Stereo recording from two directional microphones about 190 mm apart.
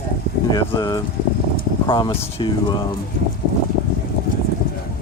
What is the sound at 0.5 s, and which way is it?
Speech, 20° left (ahead or behind).